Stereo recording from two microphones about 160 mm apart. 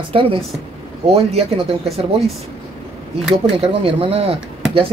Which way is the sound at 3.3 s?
35° right (ahead or behind).